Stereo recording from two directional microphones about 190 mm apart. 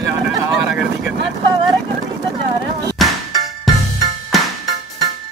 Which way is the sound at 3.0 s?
Centre (ahead or behind).